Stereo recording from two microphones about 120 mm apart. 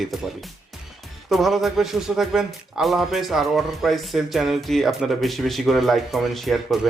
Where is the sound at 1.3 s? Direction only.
Centre (ahead or behind).